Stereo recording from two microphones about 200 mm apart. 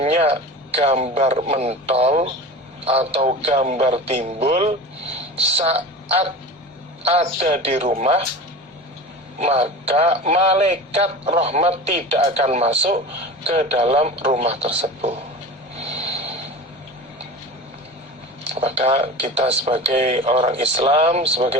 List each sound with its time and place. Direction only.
0.0 s a woman's voice: 30° right (ahead or behind)
9.4 s speech: 30° right (ahead or behind)
15.7 s vehicle: 30° right (ahead or behind)
18.5 s speech: 30° right (ahead or behind)